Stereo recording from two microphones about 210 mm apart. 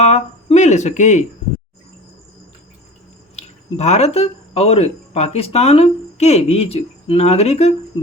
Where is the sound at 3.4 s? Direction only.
30° left (ahead or behind).